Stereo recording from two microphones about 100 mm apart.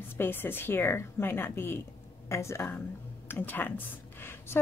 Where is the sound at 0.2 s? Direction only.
20° left (ahead or behind).